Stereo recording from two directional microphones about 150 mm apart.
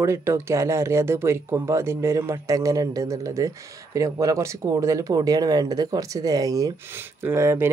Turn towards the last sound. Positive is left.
turn(degrees=-20)  # may be behind; listen again after turning